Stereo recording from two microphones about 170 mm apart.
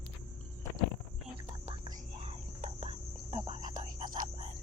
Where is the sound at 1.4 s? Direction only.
40° right (ahead or behind).